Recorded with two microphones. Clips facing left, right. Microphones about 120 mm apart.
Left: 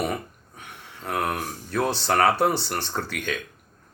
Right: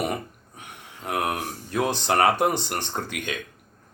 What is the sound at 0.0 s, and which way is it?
Speech, 15° right (ahead or behind).